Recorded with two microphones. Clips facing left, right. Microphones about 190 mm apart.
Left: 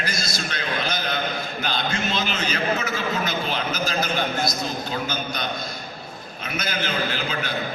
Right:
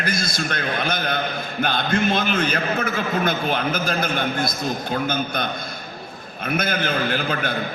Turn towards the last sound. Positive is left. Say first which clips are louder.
# right 4 dB
turn(degrees=-55)  # may be behind; listen again after turning